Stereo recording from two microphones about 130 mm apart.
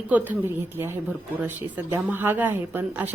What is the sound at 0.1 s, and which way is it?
A woman's voice, 15° right (ahead or behind).